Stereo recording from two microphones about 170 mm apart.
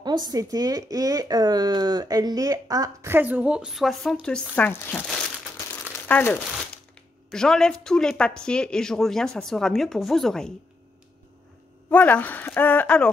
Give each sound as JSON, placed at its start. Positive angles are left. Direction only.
{"t": 0.0, "sound": "speech", "side_deg": -25}
{"t": 11.9, "sound": "speech", "side_deg": 10}